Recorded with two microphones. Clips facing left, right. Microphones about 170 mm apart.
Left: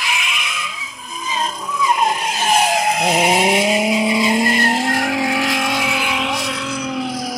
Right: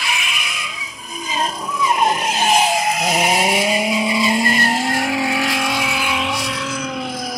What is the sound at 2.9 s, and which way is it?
Vehicle, 25° left (ahead or behind).